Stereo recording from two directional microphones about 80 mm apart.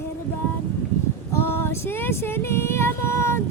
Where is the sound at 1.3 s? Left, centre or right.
Left.